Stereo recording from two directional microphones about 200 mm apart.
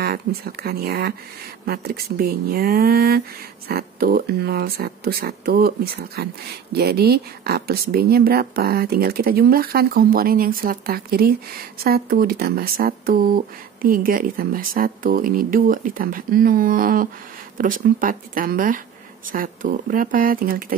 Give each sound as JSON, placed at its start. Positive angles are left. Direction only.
{"t": 0.0, "sound": "speech", "side_deg": -50}